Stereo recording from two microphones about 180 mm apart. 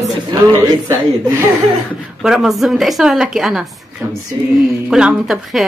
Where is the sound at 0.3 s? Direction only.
20° right (ahead or behind).